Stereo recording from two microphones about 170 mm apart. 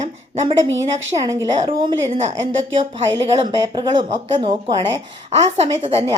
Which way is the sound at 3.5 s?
25° right (ahead or behind).